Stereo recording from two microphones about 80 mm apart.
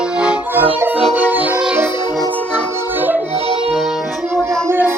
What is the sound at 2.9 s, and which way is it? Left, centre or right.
Music, right.